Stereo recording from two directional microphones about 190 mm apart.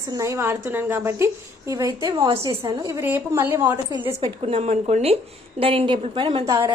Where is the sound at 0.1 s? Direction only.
15° right (ahead or behind).